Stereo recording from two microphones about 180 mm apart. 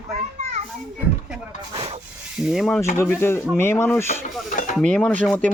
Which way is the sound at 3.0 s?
15° left (ahead or behind).